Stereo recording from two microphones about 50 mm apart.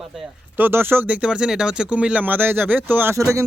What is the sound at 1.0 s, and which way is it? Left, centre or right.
Speech, right.